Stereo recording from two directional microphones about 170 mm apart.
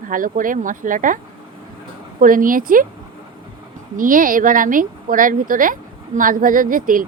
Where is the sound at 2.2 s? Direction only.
55° right (ahead or behind).